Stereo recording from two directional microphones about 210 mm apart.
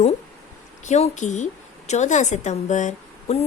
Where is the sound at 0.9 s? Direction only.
35° left (ahead or behind).